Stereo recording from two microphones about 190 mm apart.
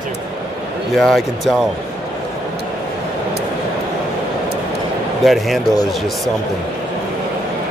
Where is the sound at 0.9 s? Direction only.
Centre (ahead or behind).